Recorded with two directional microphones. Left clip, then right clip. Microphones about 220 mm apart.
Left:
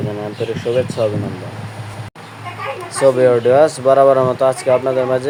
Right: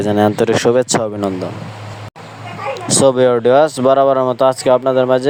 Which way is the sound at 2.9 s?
40° right (ahead or behind).